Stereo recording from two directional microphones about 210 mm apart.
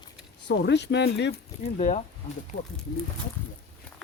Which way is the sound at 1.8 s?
35° left (ahead or behind).